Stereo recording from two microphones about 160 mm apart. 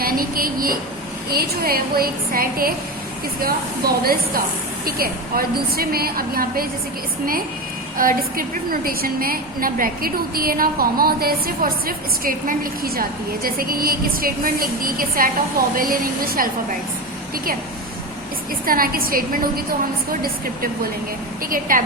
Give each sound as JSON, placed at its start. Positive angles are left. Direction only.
{"t": 0.0, "sound": "a woman's voice", "side_deg": -65}
{"t": 7.9, "sound": "a woman's voice", "side_deg": -60}
{"t": 18.6, "sound": "a woman's voice", "side_deg": -65}
{"t": 21.5, "sound": "a woman's voice", "side_deg": -60}